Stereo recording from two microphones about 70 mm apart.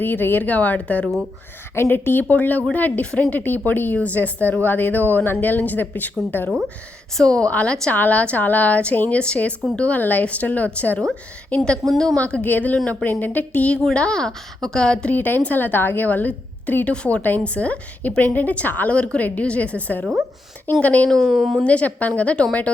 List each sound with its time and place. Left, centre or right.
0.0 s a woman's voice: left
1.7 s a woman's voice: left
7.2 s a woman's voice: centre
12.2 s a woman's voice: left
15.1 s a woman's voice: left
21.1 s speech: centre
21.6 s a woman's voice: centre